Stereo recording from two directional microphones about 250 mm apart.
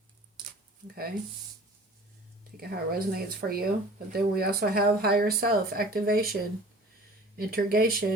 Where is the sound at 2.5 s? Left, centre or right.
Right.